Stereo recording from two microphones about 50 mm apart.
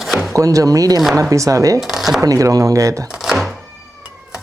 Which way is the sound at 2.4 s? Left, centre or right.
Right.